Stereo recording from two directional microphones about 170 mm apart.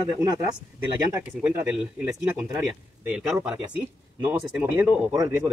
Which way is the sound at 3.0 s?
5° right (ahead or behind).